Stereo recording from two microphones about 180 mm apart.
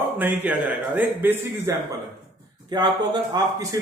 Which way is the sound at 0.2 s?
10° right (ahead or behind).